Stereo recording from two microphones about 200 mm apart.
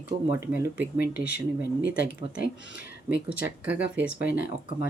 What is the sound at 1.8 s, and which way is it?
Speech, 65° right (ahead or behind).